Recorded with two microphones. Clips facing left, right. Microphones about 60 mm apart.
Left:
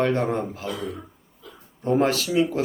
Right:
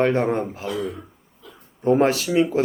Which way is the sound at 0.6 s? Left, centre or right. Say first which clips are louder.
Right 3 dB; centre.